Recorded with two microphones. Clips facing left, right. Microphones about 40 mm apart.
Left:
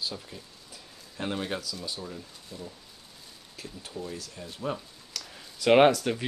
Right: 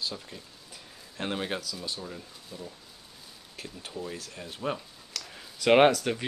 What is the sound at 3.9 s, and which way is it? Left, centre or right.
Speech, centre.